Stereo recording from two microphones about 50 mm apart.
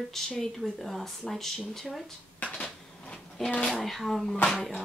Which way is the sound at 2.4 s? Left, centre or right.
Left.